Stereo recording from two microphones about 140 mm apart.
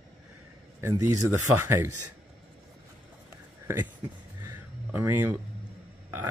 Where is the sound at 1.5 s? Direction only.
20° right (ahead or behind).